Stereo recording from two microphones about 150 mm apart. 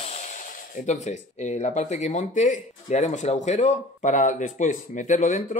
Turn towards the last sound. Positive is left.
turn(degrees=60)  # may be behind; listen again after turning